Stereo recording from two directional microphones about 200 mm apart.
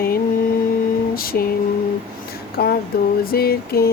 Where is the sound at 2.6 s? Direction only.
55° left (ahead or behind).